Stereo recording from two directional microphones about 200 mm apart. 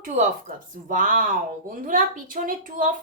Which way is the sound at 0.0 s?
40° right (ahead or behind).